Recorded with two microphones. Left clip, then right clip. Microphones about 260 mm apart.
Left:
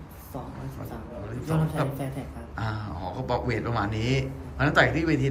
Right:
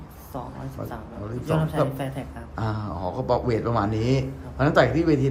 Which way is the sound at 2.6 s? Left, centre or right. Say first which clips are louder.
Right 4 dB; right.